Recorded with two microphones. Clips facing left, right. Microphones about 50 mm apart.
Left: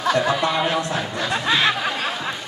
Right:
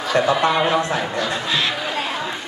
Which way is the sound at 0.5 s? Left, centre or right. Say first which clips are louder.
Right 3 dB; centre.